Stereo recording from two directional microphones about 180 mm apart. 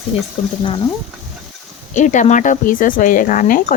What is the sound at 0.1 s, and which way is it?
Speech, 35° left (ahead or behind).